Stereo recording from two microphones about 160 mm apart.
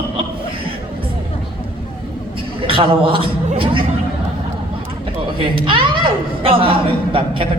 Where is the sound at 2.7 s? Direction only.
35° right (ahead or behind).